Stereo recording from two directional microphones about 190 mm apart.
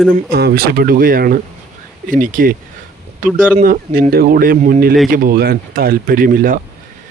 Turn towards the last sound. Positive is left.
turn(degrees=-50)  # may be behind; listen again after turning